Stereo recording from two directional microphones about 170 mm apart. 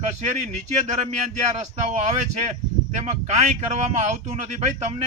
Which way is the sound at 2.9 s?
40° right (ahead or behind).